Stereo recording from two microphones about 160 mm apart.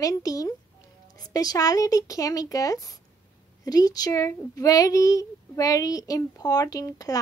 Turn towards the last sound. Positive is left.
turn(degrees=20)  # may be behind; listen again after turning